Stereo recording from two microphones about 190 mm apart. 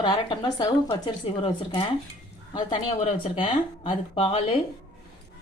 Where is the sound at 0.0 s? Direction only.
25° left (ahead or behind).